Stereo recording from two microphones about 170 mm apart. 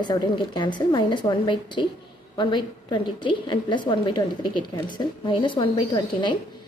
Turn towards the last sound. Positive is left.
turn(degrees=25)  # may be behind; listen again after turning